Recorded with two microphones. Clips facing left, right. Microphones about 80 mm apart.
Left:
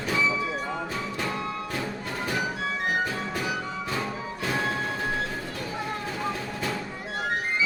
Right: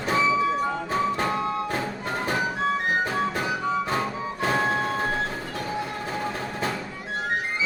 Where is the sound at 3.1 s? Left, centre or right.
Right.